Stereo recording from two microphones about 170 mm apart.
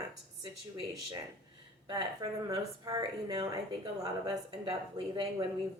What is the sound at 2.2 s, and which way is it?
Speech, 25° right (ahead or behind).